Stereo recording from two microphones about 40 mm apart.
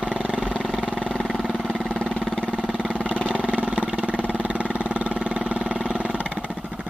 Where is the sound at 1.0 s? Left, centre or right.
Centre.